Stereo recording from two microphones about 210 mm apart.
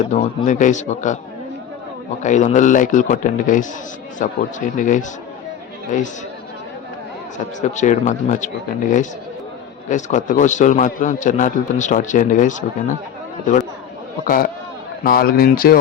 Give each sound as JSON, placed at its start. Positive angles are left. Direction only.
{"t": 0.1, "sound": "a man's voice", "side_deg": 35}
{"t": 2.2, "sound": "a man's voice", "side_deg": 35}
{"t": 7.6, "sound": "a man's voice", "side_deg": 35}
{"t": 9.9, "sound": "a man's voice", "side_deg": 35}
{"t": 14.3, "sound": "speech", "side_deg": 45}